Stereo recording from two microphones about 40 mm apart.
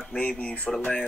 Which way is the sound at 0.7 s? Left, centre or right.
Centre.